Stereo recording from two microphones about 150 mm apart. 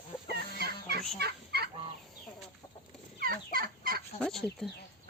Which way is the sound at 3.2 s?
75° right (ahead or behind).